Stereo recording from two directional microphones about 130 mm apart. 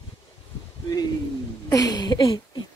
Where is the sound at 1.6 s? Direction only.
30° left (ahead or behind).